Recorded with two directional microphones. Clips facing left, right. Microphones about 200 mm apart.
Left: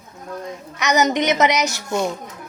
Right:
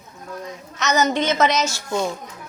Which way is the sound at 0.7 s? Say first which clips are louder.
Left 1 dB; 15° left (ahead or behind).